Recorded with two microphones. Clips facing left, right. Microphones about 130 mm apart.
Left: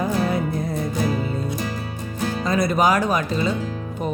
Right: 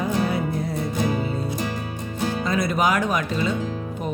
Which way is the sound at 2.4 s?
40° left (ahead or behind).